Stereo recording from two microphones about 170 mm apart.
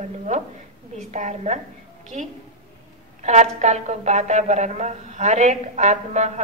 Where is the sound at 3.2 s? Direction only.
45° right (ahead or behind).